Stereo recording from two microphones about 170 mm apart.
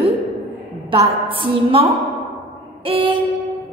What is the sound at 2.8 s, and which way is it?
Music, 30° right (ahead or behind).